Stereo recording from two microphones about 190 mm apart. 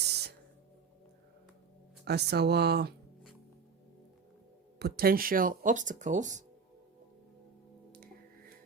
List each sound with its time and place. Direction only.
0.1 s a sound: 60° right (ahead or behind)
2.0 s speech: 60° right (ahead or behind)
4.8 s speech: 55° right (ahead or behind); by 6.4 s 40° right (ahead or behind)
7.9 s music: 50° right (ahead or behind)